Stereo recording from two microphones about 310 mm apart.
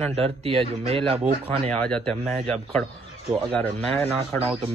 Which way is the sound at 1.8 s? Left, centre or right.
Centre.